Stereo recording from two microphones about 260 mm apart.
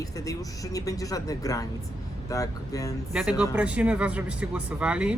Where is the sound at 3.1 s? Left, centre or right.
Centre.